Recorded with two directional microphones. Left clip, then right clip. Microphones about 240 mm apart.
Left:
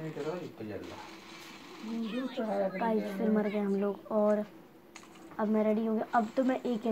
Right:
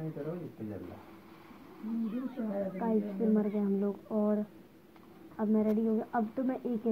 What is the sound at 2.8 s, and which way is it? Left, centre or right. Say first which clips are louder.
Speech: left 1 dB; left.